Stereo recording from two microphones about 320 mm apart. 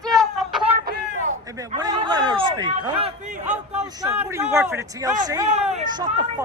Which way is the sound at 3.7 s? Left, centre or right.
Centre.